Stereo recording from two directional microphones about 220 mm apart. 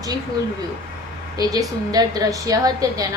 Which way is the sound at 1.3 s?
15° right (ahead or behind).